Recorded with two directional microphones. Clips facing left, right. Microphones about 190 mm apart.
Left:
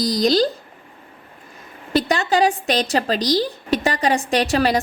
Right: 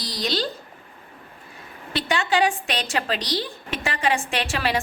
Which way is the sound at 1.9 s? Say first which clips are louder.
Left 5 dB; 40° left (ahead or behind).